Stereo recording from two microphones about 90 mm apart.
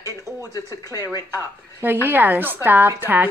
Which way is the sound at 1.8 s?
25° right (ahead or behind).